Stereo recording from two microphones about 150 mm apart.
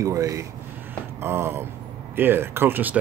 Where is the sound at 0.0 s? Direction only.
20° right (ahead or behind).